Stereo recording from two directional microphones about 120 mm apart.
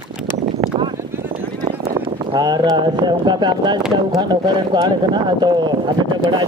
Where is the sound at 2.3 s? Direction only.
35° right (ahead or behind).